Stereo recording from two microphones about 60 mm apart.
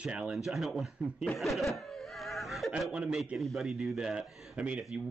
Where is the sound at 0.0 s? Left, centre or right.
Centre.